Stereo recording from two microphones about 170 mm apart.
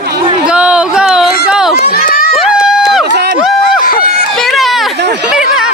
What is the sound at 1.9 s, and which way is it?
Run, 60° left (ahead or behind).